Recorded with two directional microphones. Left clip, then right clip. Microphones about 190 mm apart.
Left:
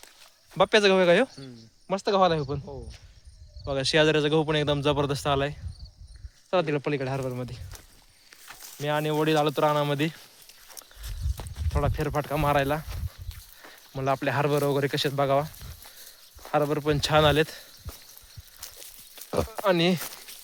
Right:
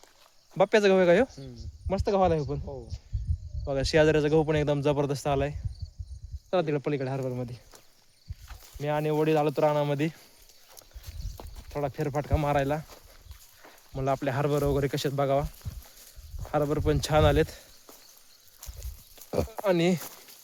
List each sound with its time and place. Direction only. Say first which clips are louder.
0.5 s speech: left 1 dB; 15° right (ahead or behind)
8.8 s speech: left 1 dB; 10° right (ahead or behind)
11.4 s a sound: left 3 dB; 35° left (ahead or behind)
11.7 s speech: left 2 dB; 5° right (ahead or behind)
13.9 s speech: left 2 dB; 10° right (ahead or behind)
16.5 s speech: left 2 dB; 15° right (ahead or behind)
18.6 s a sound: left 5 dB; 50° left (ahead or behind)
19.1 s a sound: left 2 dB; 15° right (ahead or behind)
19.6 s speech: left 2 dB; 10° right (ahead or behind)